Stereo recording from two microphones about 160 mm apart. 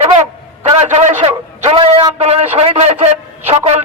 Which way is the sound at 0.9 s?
40° right (ahead or behind).